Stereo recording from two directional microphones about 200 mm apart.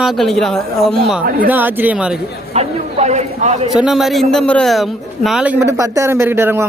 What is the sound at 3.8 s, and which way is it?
A man's voice, centre (ahead or behind).